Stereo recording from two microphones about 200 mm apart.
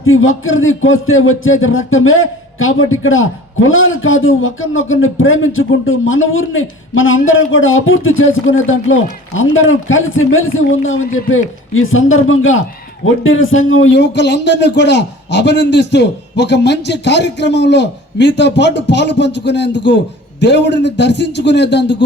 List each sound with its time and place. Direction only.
0.0 s a man's voice: 90° left; by 22.0 s 60° left (ahead or behind)